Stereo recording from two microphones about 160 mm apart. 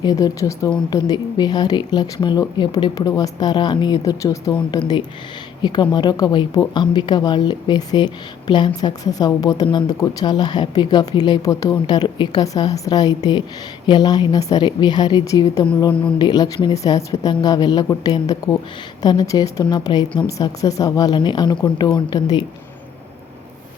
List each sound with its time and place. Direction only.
0.0 s a woman's voice: 25° left (ahead or behind)
15.7 s a woman's voice: 30° left (ahead or behind)